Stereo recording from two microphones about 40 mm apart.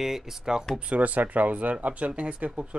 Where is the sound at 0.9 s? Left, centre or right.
Right.